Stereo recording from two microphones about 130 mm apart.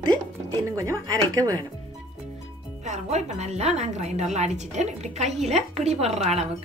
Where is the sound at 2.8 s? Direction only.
65° right (ahead or behind).